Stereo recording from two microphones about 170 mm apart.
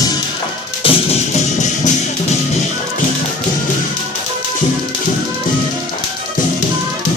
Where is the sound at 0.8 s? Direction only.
40° left (ahead or behind).